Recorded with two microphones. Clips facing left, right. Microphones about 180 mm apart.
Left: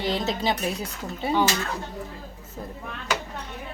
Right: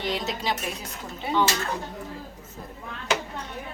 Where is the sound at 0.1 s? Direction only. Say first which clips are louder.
Left 4 dB; 30° left (ahead or behind).